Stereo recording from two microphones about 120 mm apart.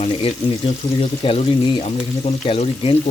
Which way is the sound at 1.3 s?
65° left (ahead or behind).